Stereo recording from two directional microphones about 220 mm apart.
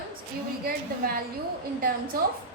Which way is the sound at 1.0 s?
40° right (ahead or behind).